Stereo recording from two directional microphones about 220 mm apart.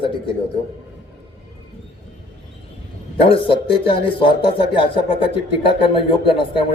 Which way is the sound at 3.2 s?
25° left (ahead or behind).